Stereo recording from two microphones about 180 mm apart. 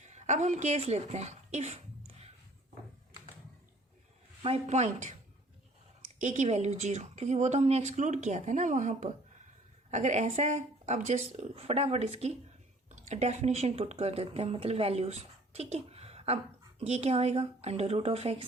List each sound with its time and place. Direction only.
0.0 s speech: 40° right (ahead or behind)
4.4 s a woman's voice: 35° right (ahead or behind)
6.1 s a woman's voice: 40° right (ahead or behind)